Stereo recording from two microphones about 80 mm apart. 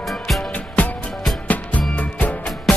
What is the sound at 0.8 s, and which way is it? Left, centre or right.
Music, centre.